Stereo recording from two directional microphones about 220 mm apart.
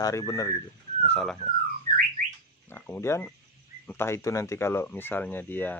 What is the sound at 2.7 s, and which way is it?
Speech, 10° left (ahead or behind).